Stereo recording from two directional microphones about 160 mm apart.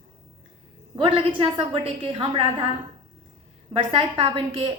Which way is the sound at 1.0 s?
35° right (ahead or behind).